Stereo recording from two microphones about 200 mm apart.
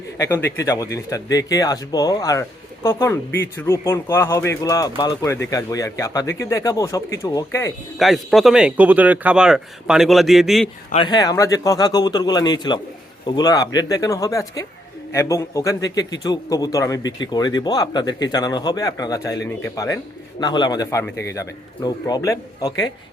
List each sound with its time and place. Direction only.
0.2 s speech: 10° left (ahead or behind)
7.9 s speech: centre (ahead or behind)
10.9 s speech: 20° left (ahead or behind)